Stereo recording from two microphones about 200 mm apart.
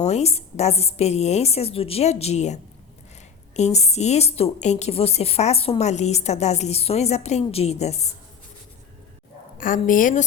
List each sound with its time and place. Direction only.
0.0 s a woman's voice: 35° left (ahead or behind)
9.6 s a woman's voice: 40° left (ahead or behind)